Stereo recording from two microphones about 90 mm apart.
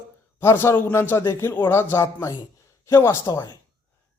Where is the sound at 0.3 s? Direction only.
25° left (ahead or behind); by 3.6 s 40° left (ahead or behind).